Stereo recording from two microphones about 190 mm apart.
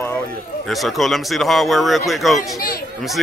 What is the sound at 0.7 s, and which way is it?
Speech, centre (ahead or behind).